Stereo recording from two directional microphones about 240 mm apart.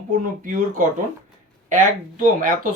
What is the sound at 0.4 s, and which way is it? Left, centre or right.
Speech, right.